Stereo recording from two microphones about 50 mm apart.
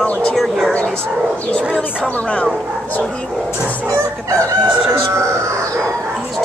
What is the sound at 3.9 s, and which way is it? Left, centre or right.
Chicken, right.